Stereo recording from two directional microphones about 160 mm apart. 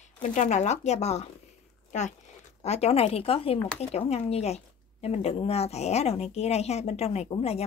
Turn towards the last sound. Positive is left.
turn(degrees=40)  # may be behind; listen again after turning